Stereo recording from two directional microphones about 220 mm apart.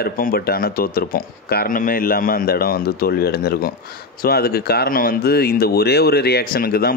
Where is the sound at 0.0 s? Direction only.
45° left (ahead or behind).